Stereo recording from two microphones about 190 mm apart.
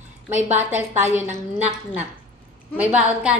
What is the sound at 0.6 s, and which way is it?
Speech, 10° right (ahead or behind).